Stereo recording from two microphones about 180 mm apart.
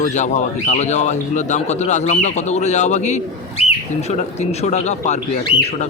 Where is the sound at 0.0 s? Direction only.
40° left (ahead or behind).